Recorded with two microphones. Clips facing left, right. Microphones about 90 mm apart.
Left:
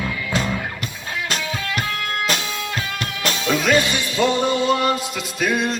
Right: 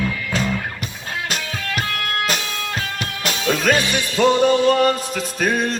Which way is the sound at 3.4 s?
45° right (ahead or behind).